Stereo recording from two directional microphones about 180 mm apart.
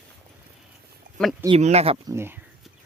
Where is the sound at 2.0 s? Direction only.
15° right (ahead or behind).